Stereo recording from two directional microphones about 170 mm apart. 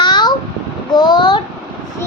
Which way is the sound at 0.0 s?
25° left (ahead or behind).